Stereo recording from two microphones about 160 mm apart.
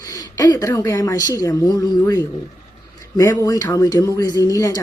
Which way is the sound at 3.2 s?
20° left (ahead or behind).